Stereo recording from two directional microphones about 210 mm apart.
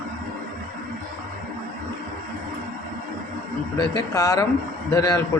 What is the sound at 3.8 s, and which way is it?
Speech, 15° left (ahead or behind).